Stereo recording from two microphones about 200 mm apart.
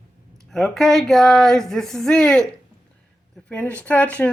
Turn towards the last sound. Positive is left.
turn(degrees=5)  # may be behind; listen again after turning